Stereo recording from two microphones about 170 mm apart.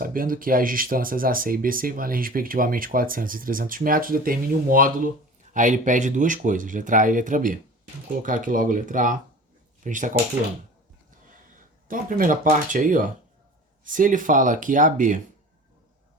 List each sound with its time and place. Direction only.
0.0 s speech: 55° right (ahead or behind)
11.9 s speech: 55° right (ahead or behind)